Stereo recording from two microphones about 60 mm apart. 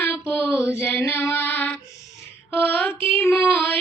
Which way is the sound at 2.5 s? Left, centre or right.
Left.